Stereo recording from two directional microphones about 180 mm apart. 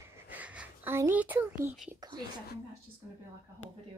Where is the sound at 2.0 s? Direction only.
25° right (ahead or behind).